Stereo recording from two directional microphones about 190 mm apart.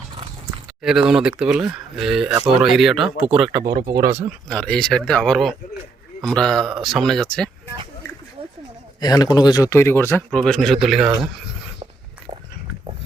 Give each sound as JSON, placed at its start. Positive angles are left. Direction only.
{"t": 0.8, "sound": "speech", "side_deg": 0}
{"t": 3.6, "sound": "speech", "side_deg": -50}
{"t": 4.4, "sound": "speech", "side_deg": 5}
{"t": 9.0, "sound": "speech", "side_deg": 20}